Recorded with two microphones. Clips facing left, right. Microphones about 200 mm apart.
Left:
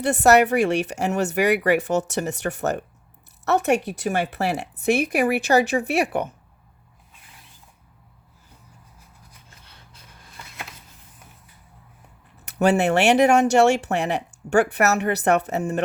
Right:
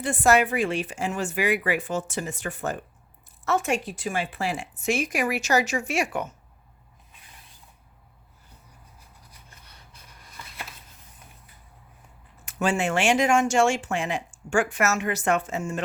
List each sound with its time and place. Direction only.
0.0 s speech: 70° left (ahead or behind)
5.5 s speech: 35° left (ahead or behind)
5.8 s speech: 60° left (ahead or behind)
12.6 s speech: 65° left (ahead or behind)